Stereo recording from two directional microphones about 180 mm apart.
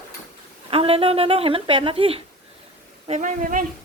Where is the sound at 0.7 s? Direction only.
30° right (ahead or behind).